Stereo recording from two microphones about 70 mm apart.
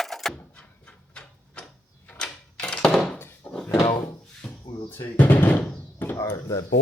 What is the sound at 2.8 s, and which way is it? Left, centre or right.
Thunk, centre.